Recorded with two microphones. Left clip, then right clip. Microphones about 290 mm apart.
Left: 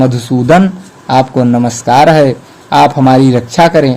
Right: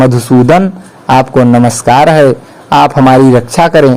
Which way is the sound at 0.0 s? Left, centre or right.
Right.